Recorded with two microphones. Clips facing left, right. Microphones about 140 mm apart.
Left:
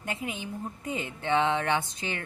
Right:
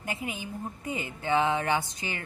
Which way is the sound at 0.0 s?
5° right (ahead or behind).